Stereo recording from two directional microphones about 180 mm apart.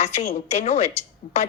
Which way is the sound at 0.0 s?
40° left (ahead or behind).